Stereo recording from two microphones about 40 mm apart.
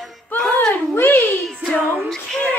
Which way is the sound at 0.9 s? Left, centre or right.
Left.